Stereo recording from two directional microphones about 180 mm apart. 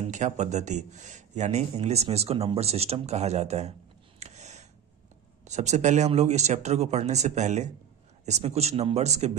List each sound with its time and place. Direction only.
0.0 s speech: 40° right (ahead or behind)
4.2 s a sound: 40° right (ahead or behind)
5.4 s speech: 40° right (ahead or behind)